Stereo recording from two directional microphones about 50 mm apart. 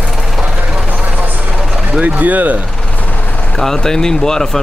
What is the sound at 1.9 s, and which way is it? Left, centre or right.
Speech, right.